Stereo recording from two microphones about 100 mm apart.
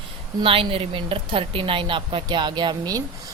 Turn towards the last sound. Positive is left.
turn(degrees=-40)  # may be behind; listen again after turning